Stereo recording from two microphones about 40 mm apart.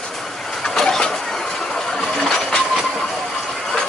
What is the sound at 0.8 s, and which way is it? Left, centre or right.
Vehicle, centre.